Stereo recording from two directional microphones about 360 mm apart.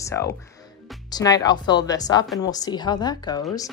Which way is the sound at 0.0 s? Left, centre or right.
Centre.